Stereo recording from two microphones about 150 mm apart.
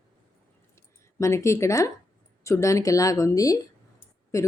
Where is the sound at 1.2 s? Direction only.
20° left (ahead or behind).